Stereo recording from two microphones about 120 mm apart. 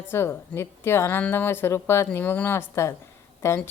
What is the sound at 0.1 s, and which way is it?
A woman's voice, 20° left (ahead or behind).